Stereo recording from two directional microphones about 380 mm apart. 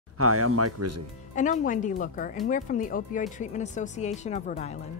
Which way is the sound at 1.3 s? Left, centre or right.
Centre.